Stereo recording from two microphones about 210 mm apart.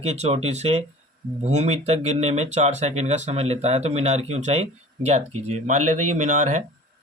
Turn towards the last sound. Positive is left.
turn(degrees=-35)  # may be behind; listen again after turning